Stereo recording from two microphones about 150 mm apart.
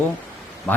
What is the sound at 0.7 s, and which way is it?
Speech, 10° left (ahead or behind).